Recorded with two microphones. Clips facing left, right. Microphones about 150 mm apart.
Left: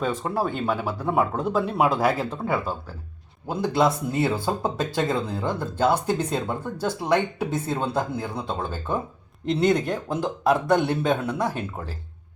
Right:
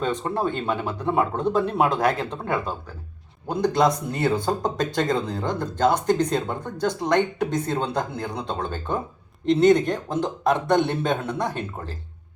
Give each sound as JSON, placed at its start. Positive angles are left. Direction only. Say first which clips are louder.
{"t": 0.0, "sound": "speech", "louder": "right 1 dB", "side_deg": 5}